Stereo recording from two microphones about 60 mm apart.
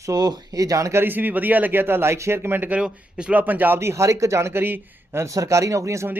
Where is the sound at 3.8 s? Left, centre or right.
Right.